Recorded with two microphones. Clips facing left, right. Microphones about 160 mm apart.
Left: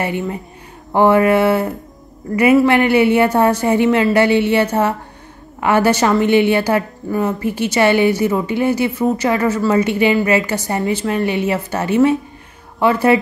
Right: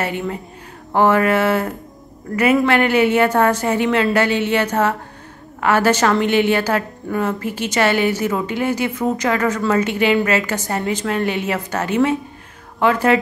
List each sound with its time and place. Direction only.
0.9 s a woman's voice: 15° left (ahead or behind)